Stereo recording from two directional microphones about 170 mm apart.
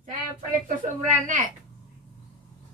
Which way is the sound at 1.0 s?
50° right (ahead or behind).